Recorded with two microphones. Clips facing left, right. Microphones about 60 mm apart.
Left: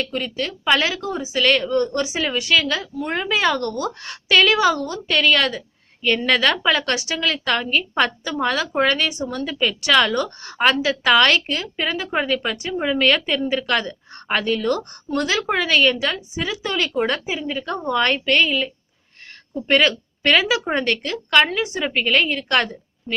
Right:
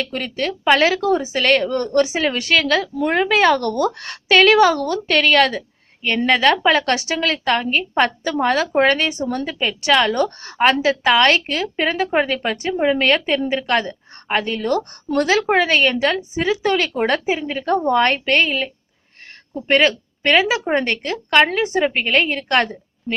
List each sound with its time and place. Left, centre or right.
0.1 s a woman's voice: right
6.2 s a woman's voice: right
6.5 s a woman's voice: right
11.4 s a woman's voice: right